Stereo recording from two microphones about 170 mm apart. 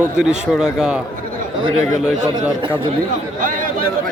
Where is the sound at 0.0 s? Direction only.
5° right (ahead or behind).